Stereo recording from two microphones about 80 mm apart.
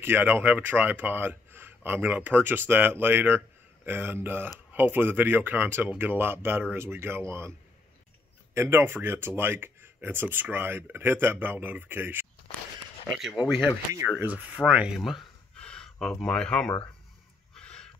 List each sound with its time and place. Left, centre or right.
0.0 s speech: right
8.5 s speech: right
14.0 s speech: right
15.0 s speech: centre
15.5 s a sound: centre